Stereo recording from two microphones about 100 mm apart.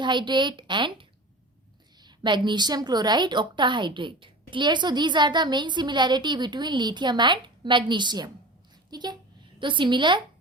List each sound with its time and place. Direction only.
0.0 s a woman's voice: 50° right (ahead or behind)